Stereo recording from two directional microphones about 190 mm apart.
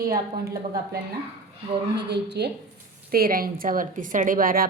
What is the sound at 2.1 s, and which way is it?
Speech, 60° right (ahead or behind).